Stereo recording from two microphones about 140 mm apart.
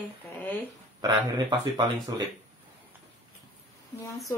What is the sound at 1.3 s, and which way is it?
Speech, 30° right (ahead or behind).